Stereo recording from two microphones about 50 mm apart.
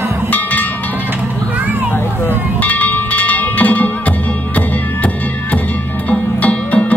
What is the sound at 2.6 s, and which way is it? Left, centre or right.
Music, left.